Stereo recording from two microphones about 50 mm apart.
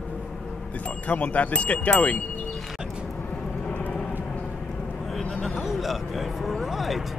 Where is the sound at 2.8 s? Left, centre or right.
Centre.